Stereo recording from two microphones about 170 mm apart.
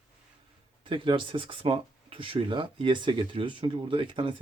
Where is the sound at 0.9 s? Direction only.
30° right (ahead or behind).